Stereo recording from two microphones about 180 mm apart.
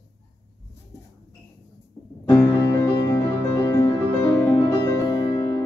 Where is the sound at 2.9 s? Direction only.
20° left (ahead or behind).